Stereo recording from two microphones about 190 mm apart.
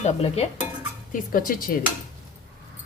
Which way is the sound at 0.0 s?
35° left (ahead or behind).